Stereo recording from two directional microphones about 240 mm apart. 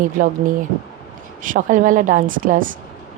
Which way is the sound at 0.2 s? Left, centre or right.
Right.